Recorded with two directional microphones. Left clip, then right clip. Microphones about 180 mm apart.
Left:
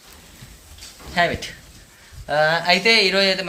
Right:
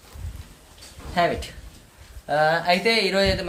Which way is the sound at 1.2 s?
15° right (ahead or behind).